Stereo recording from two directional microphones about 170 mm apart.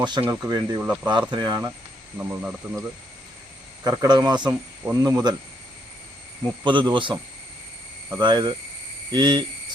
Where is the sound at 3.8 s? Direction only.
20° right (ahead or behind).